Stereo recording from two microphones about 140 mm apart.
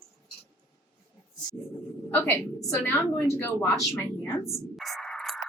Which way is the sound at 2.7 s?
20° left (ahead or behind).